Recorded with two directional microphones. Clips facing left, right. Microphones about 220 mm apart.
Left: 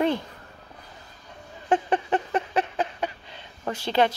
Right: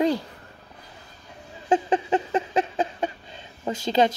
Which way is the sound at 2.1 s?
25° right (ahead or behind).